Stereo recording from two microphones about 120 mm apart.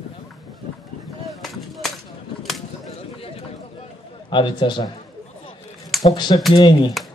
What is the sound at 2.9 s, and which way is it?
Run, 55° left (ahead or behind).